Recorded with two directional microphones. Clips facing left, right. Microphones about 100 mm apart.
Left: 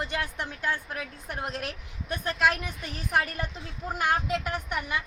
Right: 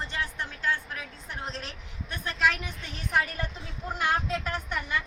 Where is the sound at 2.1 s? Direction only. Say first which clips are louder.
Left 2 dB; 45° left (ahead or behind).